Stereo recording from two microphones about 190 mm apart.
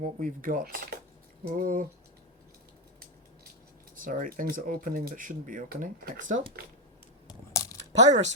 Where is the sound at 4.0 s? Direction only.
45° right (ahead or behind).